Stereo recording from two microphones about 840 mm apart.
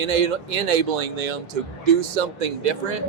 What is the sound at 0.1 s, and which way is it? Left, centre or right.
Speech, right.